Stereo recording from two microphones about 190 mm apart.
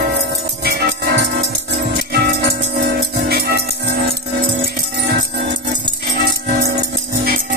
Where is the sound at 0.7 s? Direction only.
60° right (ahead or behind).